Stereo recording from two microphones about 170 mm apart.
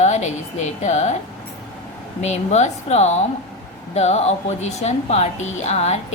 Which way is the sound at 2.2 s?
40° left (ahead or behind).